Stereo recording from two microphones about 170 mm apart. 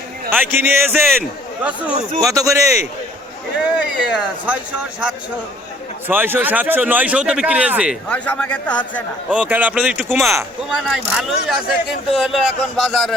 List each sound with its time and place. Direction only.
0.3 s speech: 10° right (ahead or behind)
2.2 s speech: 20° right (ahead or behind)
3.6 s speech: 5° right (ahead or behind)
8.1 s a man's voice: 10° left (ahead or behind)
9.5 s speech: 10° right (ahead or behind)